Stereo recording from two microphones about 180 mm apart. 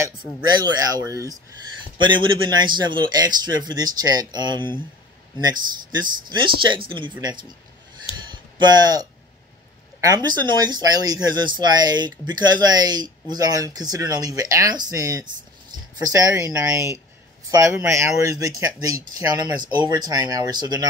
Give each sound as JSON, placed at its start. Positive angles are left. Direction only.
{"t": 0.5, "sound": "speech", "side_deg": -25}
{"t": 8.3, "sound": "a sound", "side_deg": -25}
{"t": 9.9, "sound": "speech", "side_deg": -20}